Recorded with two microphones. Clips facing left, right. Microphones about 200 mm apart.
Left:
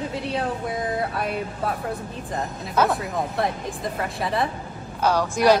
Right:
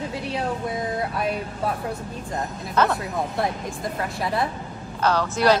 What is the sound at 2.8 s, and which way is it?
Speech, 10° left (ahead or behind).